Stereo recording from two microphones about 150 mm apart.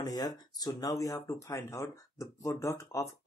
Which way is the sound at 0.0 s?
25° left (ahead or behind).